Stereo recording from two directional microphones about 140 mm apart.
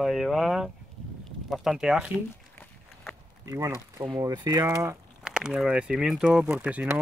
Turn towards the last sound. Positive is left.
turn(degrees=-10)  # may be behind; listen again after turning